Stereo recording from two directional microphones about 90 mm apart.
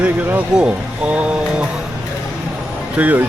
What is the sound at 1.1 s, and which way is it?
Mantra, 15° right (ahead or behind).